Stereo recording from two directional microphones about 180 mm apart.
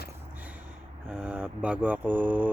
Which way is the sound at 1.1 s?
5° right (ahead or behind).